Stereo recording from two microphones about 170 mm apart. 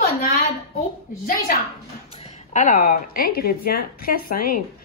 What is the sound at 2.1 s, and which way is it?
Speech, 40° left (ahead or behind).